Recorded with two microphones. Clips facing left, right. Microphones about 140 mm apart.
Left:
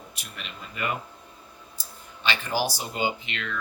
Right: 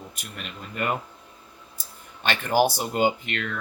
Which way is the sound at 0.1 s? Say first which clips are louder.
Right 3 dB; 45° right (ahead or behind).